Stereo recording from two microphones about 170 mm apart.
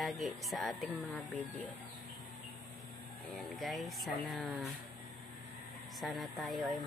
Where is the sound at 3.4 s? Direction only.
Centre (ahead or behind).